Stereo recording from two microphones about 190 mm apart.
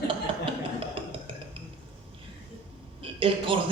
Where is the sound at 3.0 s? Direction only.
30° right (ahead or behind).